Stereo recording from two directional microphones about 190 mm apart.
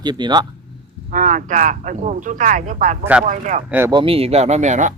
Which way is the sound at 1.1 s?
40° right (ahead or behind).